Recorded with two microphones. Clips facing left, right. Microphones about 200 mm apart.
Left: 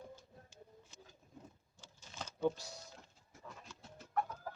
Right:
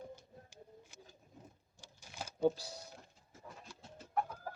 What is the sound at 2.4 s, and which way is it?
Speech, 35° right (ahead or behind).